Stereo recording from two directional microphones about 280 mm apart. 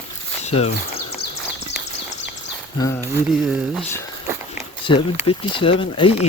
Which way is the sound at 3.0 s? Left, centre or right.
Centre.